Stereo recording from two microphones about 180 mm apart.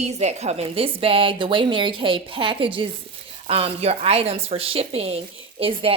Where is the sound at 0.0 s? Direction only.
40° right (ahead or behind).